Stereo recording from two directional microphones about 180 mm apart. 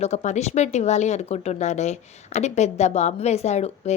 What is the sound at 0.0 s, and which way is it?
Speech, 40° left (ahead or behind).